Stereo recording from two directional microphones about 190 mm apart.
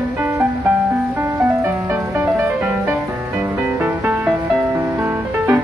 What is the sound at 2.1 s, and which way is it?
Music, 10° right (ahead or behind).